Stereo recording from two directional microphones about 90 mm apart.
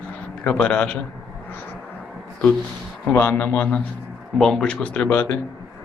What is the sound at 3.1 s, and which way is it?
Speech, 25° left (ahead or behind).